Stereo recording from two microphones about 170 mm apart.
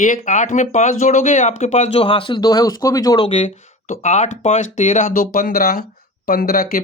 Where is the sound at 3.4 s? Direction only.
40° left (ahead or behind); by 6.8 s 55° left (ahead or behind).